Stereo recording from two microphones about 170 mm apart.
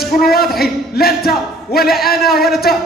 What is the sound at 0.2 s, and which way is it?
A man's voice, 60° left (ahead or behind).